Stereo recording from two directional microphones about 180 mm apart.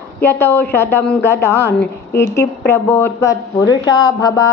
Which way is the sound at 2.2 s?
15° left (ahead or behind).